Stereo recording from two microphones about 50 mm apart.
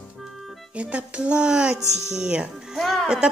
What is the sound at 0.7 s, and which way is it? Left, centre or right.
Speech, right.